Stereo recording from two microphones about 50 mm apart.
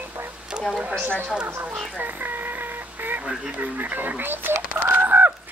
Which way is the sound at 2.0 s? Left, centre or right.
Right.